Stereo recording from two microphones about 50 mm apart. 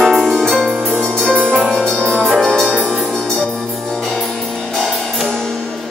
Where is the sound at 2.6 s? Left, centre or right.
Right.